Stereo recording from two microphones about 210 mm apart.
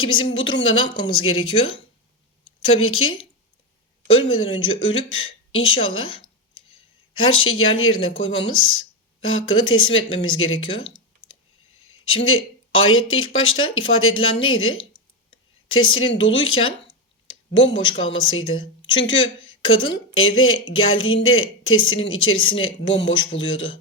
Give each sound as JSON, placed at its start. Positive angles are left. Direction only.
{"t": 0.0, "sound": "speech", "side_deg": 75}
{"t": 0.9, "sound": "speech", "side_deg": 20}
{"t": 1.1, "sound": "speech", "side_deg": 85}
{"t": 4.3, "sound": "speech", "side_deg": 70}
{"t": 11.8, "sound": "speech", "side_deg": 75}
{"t": 16.8, "sound": "clicking", "side_deg": 65}
{"t": 18.0, "sound": "speech", "side_deg": 70}
{"t": 19.4, "sound": "a sound", "side_deg": 75}
{"t": 20.1, "sound": "speech", "side_deg": 70}